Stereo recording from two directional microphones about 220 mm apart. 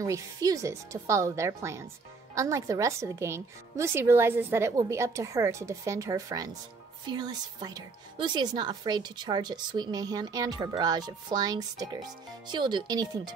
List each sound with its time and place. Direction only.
0.0 s a woman's voice: 15° right (ahead or behind)